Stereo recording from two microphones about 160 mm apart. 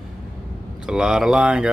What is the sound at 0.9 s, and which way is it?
Speech, 5° right (ahead or behind).